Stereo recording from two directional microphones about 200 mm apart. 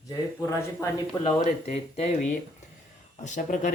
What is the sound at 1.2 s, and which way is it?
Speech, 35° left (ahead or behind).